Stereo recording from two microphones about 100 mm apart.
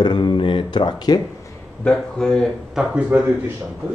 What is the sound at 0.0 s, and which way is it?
Speech, 45° left (ahead or behind).